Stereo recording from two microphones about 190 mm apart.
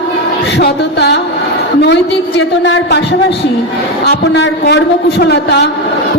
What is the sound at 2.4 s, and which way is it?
A woman's voice, 65° left (ahead or behind).